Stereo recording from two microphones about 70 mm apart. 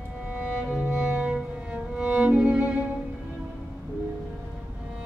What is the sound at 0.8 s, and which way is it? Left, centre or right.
Music, right.